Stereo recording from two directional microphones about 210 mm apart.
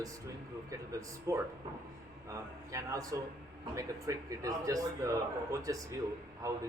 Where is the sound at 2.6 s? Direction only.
15° right (ahead or behind).